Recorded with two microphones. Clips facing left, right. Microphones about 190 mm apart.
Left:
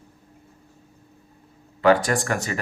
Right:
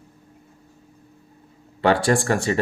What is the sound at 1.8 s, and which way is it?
Speech, 30° right (ahead or behind).